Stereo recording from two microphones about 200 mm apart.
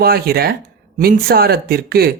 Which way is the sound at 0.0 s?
50° right (ahead or behind).